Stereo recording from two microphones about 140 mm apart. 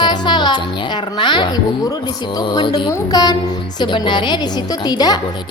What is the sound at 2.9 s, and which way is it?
A woman's voice, 30° left (ahead or behind).